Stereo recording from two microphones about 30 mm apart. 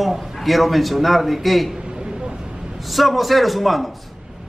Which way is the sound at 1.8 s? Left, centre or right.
Right.